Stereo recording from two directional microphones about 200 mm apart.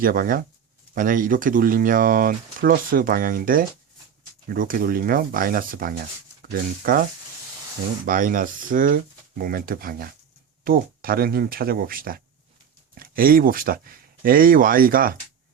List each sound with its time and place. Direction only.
0.0 s speech: 45° right (ahead or behind)